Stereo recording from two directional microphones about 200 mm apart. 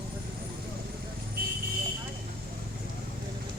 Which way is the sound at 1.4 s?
45° right (ahead or behind).